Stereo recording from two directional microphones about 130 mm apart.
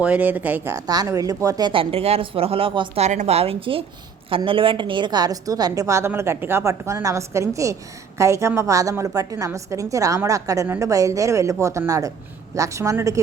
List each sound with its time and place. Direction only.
0.0 s speech: 10° right (ahead or behind); by 3.0 s 40° right (ahead or behind)
3.0 s a woman's voice: 65° right (ahead or behind); by 13.1 s 25° right (ahead or behind)